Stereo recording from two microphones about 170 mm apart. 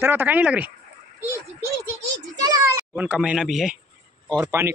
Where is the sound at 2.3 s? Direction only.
25° right (ahead or behind).